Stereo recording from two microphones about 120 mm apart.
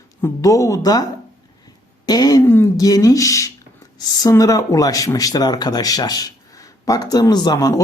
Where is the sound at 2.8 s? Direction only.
30° left (ahead or behind).